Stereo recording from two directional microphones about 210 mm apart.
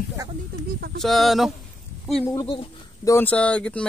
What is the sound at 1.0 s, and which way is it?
Speech, centre (ahead or behind).